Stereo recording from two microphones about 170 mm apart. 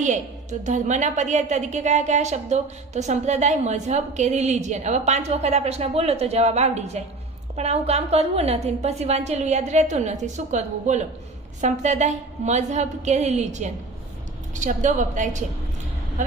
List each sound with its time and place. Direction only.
0.6 s a woman's voice: 45° right (ahead or behind)